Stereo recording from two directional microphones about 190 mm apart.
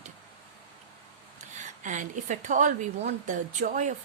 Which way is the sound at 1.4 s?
40° right (ahead or behind).